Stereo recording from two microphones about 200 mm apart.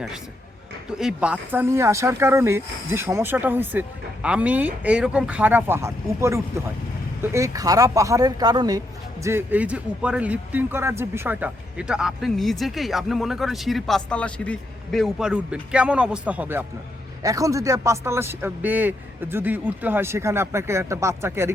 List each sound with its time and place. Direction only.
0.9 s speech: 5° right (ahead or behind)